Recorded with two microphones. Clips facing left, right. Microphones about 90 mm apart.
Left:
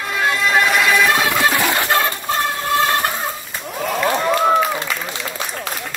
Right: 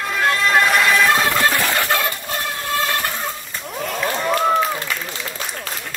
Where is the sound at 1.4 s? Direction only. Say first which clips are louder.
Left 1 dB; 15° left (ahead or behind).